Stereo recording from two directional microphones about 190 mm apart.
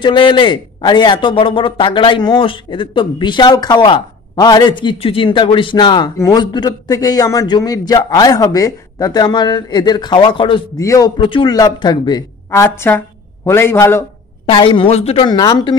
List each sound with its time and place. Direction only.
0.0 s a man's voice: 25° left (ahead or behind)
14.4 s a man's voice: 25° left (ahead or behind)